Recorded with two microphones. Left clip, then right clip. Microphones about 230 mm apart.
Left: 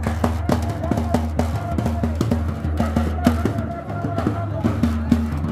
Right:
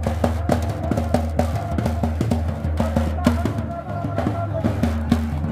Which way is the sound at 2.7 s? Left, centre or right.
Right.